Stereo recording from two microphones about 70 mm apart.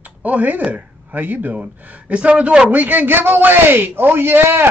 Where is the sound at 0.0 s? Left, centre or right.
Right.